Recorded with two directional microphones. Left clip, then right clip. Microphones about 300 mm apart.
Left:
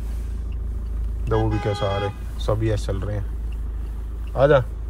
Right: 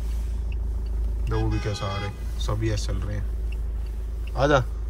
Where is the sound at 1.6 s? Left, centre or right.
Centre.